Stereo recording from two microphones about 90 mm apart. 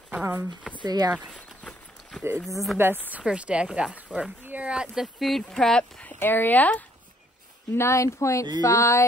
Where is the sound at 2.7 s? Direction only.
25° right (ahead or behind).